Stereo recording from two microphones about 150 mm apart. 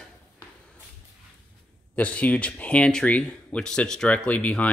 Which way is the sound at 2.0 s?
10° left (ahead or behind).